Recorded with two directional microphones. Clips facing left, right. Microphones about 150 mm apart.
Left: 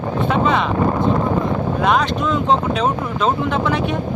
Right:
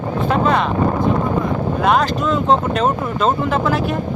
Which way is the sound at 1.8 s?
Centre (ahead or behind).